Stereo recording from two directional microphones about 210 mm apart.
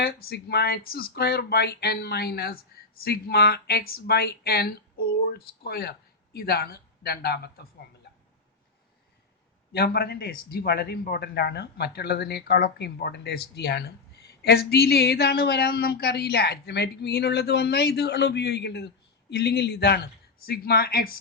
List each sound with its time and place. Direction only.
0.0 s a man's voice: 50° left (ahead or behind)
9.7 s a man's voice: 50° left (ahead or behind)